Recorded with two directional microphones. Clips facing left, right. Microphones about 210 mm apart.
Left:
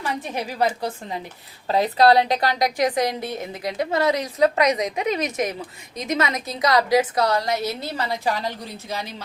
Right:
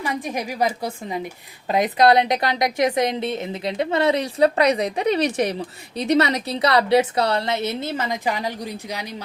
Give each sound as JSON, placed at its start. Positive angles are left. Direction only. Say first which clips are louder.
{"t": 0.0, "sound": "a woman's voice", "louder": "right 2 dB", "side_deg": -10}